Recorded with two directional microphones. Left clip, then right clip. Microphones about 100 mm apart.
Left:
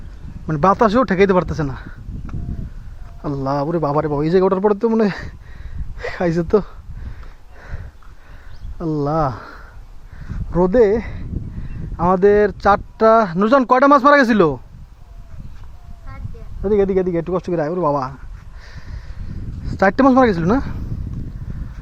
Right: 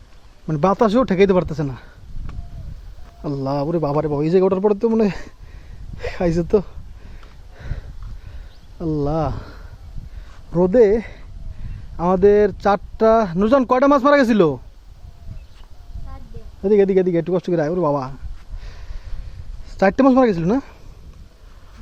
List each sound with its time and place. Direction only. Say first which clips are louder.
0.4 s speech: left 3 dB; 15° right (ahead or behind)
3.2 s speech: left 2 dB; centre (ahead or behind)
8.8 s speech: left 3 dB; 5° right (ahead or behind)
10.5 s speech: even; 15° right (ahead or behind)
16.6 s speech: right 1 dB; 60° right (ahead or behind)
17.6 s speech: even; 40° right (ahead or behind)
17.9 s speech: left 2 dB; 15° right (ahead or behind)
19.6 s a sound: left 1 dB; 10° right (ahead or behind)
20.0 s speech: left 2 dB; centre (ahead or behind)